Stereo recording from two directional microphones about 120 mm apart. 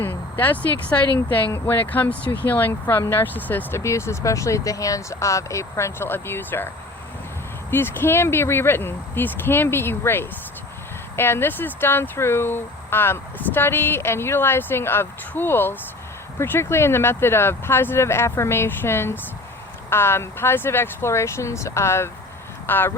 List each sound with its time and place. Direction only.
0.0 s speech: 15° left (ahead or behind)
7.7 s speech: 20° left (ahead or behind)